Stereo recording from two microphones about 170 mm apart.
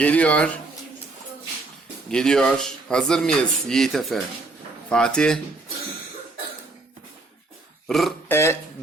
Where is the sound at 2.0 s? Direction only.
5° left (ahead or behind).